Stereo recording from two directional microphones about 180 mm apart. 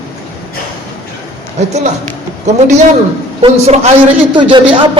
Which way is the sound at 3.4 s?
35° right (ahead or behind).